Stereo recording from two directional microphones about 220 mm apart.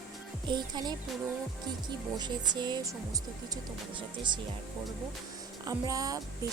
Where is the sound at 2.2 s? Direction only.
20° right (ahead or behind).